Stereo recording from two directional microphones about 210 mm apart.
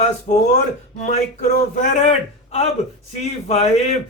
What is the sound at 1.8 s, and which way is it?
Speech, 35° left (ahead or behind).